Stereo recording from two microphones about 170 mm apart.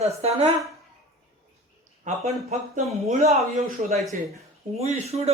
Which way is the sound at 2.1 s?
45° right (ahead or behind).